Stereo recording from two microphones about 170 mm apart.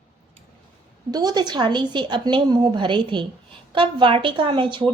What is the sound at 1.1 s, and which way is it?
A woman's voice, 25° right (ahead or behind).